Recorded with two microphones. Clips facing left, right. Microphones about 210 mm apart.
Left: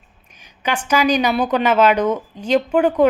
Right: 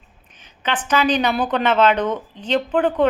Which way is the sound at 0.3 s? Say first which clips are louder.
Left 2 dB; 10° left (ahead or behind).